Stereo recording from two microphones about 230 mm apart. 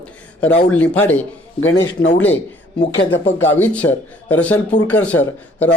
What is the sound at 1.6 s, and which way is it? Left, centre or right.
Speech, left.